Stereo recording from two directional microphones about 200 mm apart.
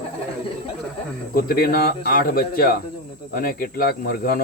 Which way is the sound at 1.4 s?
50° left (ahead or behind).